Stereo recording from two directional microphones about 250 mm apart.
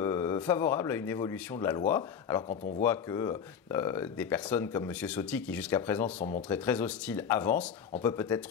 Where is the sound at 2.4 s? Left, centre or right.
Left.